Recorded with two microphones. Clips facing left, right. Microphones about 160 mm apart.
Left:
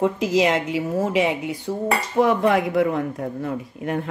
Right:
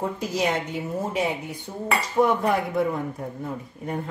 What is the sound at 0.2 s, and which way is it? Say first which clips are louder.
Speech: left 6 dB; 90° left.